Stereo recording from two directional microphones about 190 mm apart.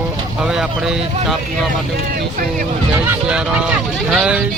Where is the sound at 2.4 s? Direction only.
45° right (ahead or behind).